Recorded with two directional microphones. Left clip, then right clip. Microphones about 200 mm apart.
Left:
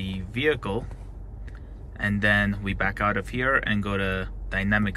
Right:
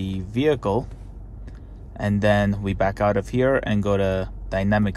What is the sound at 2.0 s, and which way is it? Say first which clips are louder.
Speech: right 2 dB; 35° right (ahead or behind).